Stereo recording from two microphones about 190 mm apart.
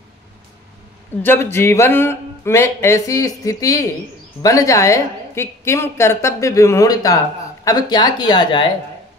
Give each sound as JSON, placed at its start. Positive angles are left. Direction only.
{"t": 1.2, "sound": "a woman's voice", "side_deg": 10}